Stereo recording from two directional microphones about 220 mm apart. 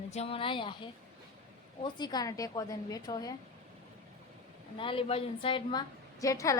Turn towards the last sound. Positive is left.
turn(degrees=15)  # may be behind; listen again after turning